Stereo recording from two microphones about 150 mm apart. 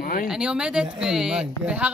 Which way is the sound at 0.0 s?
70° left (ahead or behind).